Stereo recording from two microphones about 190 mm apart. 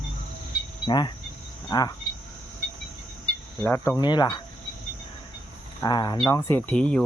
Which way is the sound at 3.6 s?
15° left (ahead or behind).